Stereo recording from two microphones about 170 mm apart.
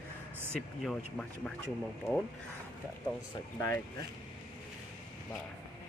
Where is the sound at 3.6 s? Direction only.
15° left (ahead or behind).